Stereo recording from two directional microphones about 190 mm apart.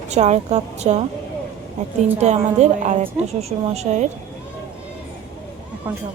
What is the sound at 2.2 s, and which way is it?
A woman's voice, 35° right (ahead or behind).